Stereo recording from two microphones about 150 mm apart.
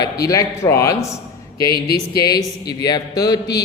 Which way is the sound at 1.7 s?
90° left.